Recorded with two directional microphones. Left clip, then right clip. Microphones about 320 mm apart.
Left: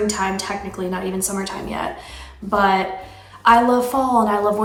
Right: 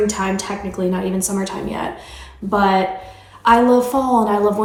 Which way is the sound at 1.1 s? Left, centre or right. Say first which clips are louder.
Right 2 dB; centre.